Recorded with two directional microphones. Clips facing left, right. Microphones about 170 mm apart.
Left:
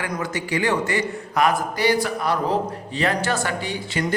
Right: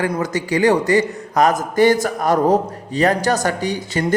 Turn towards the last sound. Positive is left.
turn(degrees=-40)  # may be behind; listen again after turning